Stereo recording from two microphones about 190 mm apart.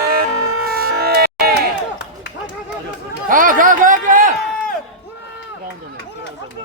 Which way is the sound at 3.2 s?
45° right (ahead or behind).